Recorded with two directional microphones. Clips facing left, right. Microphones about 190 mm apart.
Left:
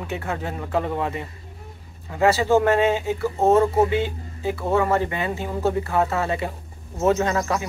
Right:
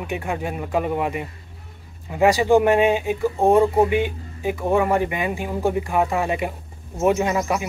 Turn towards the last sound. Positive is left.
turn(degrees=-15)  # may be behind; listen again after turning